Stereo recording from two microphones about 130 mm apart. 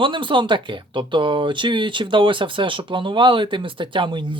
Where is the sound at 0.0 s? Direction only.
40° right (ahead or behind).